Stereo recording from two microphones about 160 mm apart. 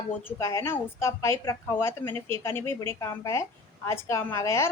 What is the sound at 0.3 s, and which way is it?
A woman's voice, 20° left (ahead or behind).